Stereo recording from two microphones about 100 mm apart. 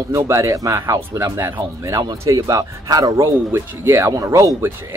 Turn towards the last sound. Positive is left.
turn(degrees=-30)  # may be behind; listen again after turning